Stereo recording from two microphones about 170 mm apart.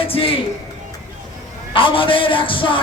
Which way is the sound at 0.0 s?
35° left (ahead or behind).